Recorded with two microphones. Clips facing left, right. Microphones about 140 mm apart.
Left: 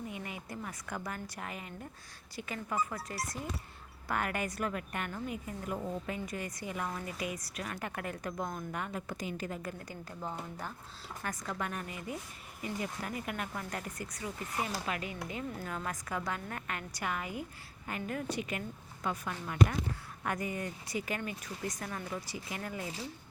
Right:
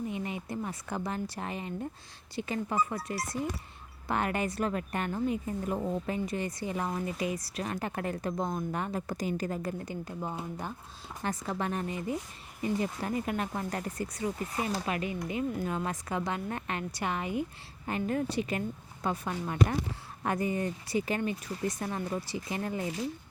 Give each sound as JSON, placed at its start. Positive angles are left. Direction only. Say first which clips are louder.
{"t": 0.1, "sound": "a woman's voice", "louder": "right 7 dB", "side_deg": -25}
{"t": 4.1, "sound": "a woman's voice", "louder": "right 4 dB", "side_deg": -25}
{"t": 9.7, "sound": "a woman's voice", "louder": "right 7 dB", "side_deg": -20}